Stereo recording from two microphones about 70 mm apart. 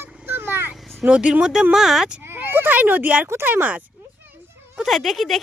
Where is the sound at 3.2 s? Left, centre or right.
Right.